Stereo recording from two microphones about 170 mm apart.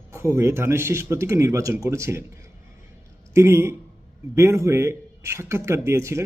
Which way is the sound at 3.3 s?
15° right (ahead or behind).